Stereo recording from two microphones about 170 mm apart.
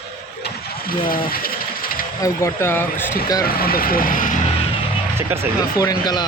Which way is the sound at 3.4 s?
60° left (ahead or behind).